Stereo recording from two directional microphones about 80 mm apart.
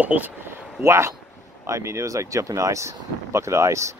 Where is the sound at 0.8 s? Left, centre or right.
Right.